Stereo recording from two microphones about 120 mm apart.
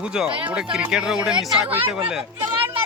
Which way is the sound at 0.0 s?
5° right (ahead or behind).